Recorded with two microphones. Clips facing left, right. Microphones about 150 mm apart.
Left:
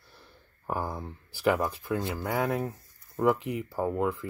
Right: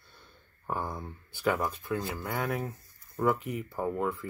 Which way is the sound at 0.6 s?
5° left (ahead or behind).